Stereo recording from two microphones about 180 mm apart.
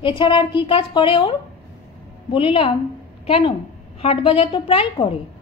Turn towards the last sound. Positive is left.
turn(degrees=30)  # may be behind; listen again after turning